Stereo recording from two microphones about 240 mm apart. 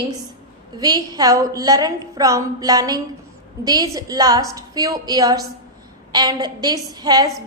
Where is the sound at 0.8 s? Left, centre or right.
Centre.